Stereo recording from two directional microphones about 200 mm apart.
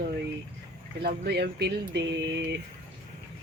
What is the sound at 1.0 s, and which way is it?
Speech, 50° right (ahead or behind).